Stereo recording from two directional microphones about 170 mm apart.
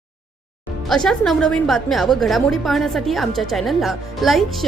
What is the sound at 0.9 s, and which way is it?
A woman's voice, centre (ahead or behind).